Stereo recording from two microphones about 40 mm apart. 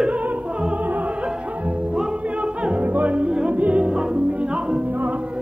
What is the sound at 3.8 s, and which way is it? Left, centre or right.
Music, right.